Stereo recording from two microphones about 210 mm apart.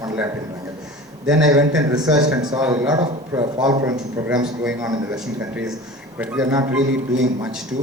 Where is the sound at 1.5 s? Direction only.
15° right (ahead or behind).